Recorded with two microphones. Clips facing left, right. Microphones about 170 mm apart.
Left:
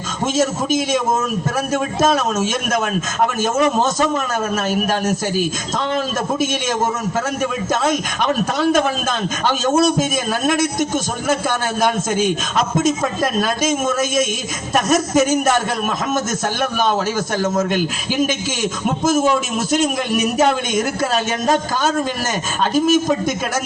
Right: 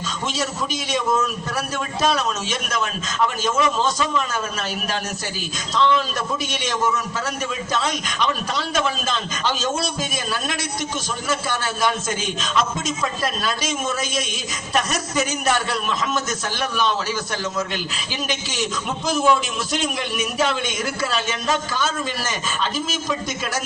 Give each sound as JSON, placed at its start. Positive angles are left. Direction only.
{"t": 0.3, "sound": "a man's voice", "side_deg": 45}